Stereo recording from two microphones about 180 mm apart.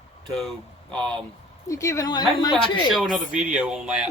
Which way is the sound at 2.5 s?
Centre (ahead or behind).